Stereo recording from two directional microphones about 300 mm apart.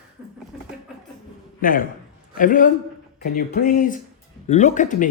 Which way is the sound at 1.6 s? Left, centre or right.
Left.